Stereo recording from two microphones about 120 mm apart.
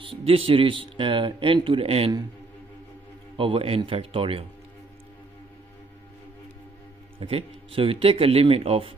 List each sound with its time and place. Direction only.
0.0 s speech: 50° right (ahead or behind)
3.3 s speech: 50° right (ahead or behind)
7.2 s speech: 50° right (ahead or behind)